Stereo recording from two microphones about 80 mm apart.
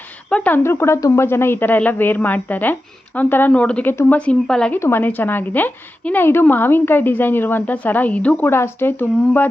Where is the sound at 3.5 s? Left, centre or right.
Centre.